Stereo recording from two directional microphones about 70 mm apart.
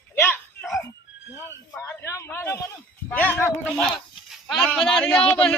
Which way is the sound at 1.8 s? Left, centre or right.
Left.